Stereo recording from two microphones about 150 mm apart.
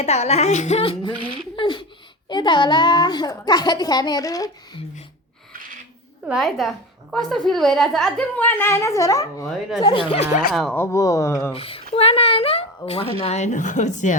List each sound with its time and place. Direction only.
0.0 s a woman's voice: 45° left (ahead or behind); by 4.8 s 25° left (ahead or behind)
6.2 s a woman's voice: centre (ahead or behind)
8.4 s a child's voice: 15° left (ahead or behind)
9.5 s a woman's voice: centre (ahead or behind)
9.8 s a woman's voice: 35° left (ahead or behind)
10.5 s a woman's voice: centre (ahead or behind)
10.8 s a child's voice: 20° left (ahead or behind)
11.5 s a woman's voice: 40° left (ahead or behind)